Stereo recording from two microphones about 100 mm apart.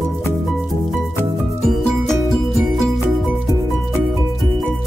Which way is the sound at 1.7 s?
5° left (ahead or behind).